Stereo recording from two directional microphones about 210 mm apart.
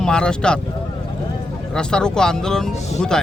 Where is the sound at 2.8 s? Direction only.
30° left (ahead or behind).